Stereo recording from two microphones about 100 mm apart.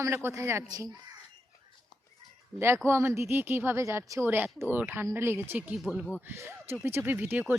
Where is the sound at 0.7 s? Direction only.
40° right (ahead or behind).